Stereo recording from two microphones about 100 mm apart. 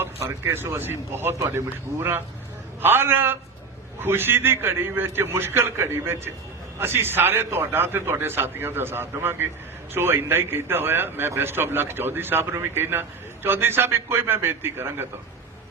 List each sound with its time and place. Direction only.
0.0 s speech: 25° right (ahead or behind)